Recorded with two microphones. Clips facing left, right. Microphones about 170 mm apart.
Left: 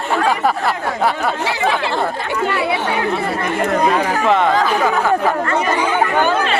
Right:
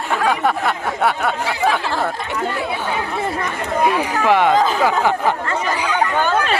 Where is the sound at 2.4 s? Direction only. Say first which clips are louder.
Left 5 dB; 75° left (ahead or behind).